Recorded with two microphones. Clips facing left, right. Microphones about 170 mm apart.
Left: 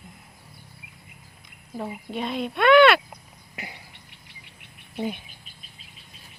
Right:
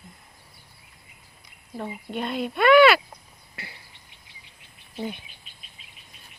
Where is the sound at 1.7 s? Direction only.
Centre (ahead or behind).